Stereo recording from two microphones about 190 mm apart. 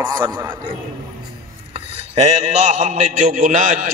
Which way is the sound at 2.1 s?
35° right (ahead or behind).